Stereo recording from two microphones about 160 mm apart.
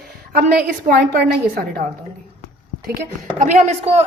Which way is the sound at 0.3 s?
75° right (ahead or behind).